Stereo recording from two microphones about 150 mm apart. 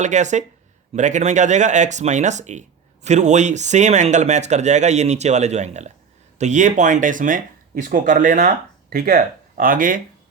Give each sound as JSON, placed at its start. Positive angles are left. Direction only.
{"t": 0.0, "sound": "speech", "side_deg": -50}